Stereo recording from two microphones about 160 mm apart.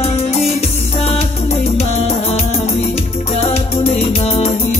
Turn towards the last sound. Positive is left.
turn(degrees=40)  # may be behind; listen again after turning